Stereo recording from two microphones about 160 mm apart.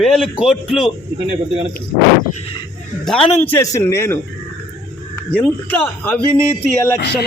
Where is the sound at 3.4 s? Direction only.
20° left (ahead or behind).